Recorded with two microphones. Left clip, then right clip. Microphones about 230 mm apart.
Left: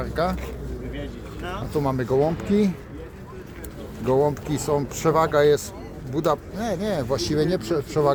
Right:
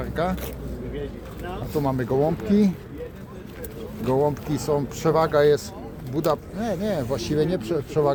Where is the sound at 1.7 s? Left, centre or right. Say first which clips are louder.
Left 1 dB; centre.